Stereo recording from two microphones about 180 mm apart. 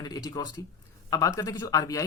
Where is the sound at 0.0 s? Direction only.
20° left (ahead or behind).